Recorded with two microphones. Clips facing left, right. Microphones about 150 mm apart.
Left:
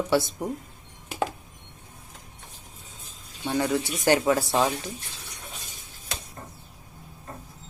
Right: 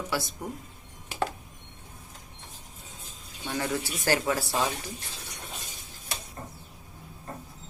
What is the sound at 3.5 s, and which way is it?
Speech, 20° left (ahead or behind).